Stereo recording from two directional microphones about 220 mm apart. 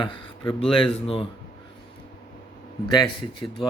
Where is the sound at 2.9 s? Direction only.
20° left (ahead or behind).